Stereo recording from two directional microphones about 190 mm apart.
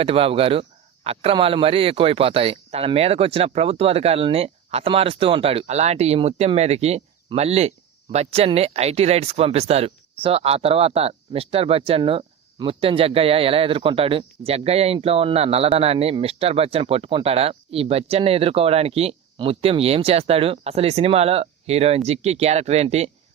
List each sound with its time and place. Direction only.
0.0 s speech: 30° right (ahead or behind)